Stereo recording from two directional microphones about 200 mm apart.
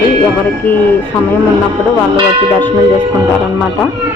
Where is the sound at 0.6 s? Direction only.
10° left (ahead or behind).